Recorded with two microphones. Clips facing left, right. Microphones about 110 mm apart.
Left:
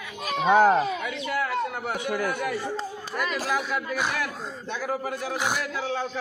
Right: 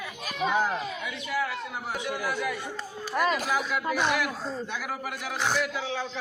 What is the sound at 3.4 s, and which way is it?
Speech, centre (ahead or behind).